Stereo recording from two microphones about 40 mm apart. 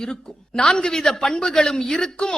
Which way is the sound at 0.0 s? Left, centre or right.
Centre.